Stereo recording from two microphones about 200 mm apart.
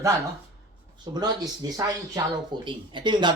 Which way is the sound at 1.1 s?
20° right (ahead or behind).